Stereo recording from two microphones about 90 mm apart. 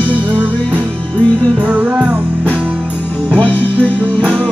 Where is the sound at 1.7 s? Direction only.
15° right (ahead or behind).